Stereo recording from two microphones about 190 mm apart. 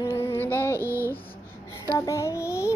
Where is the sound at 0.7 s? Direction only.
15° right (ahead or behind).